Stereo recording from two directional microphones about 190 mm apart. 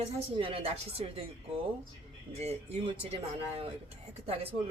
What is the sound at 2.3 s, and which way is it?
Speech, 35° right (ahead or behind).